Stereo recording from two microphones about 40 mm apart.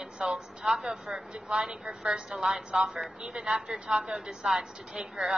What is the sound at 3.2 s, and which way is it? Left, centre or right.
A woman's voice, right.